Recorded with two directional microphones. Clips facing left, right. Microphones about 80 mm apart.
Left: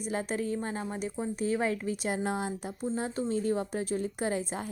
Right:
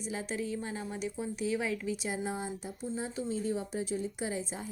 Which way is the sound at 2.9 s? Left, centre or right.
Left.